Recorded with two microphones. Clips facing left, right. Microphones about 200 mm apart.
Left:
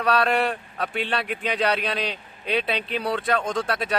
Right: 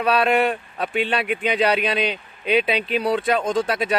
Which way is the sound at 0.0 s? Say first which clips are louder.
Right 3 dB; 5° right (ahead or behind).